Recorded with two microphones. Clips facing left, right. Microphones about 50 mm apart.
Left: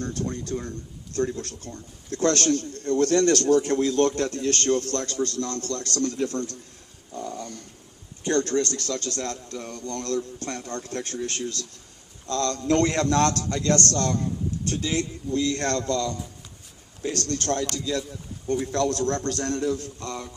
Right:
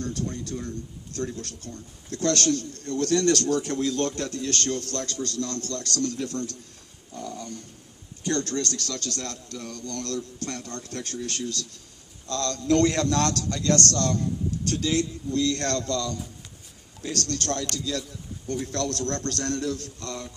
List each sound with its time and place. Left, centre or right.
0.0 s a man's voice: left
7.2 s dog: left
8.2 s a man's voice: left